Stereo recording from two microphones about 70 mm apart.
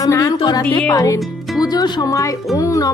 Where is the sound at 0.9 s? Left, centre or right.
Left.